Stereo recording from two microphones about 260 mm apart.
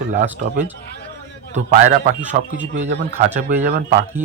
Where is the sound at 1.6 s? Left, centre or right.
Right.